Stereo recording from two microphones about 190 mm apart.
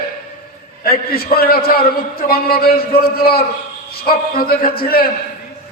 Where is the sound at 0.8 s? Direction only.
50° left (ahead or behind).